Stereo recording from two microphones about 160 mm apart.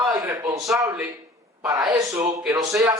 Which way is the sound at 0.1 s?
25° right (ahead or behind).